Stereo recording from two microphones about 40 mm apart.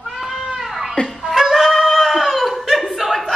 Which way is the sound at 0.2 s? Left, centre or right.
Centre.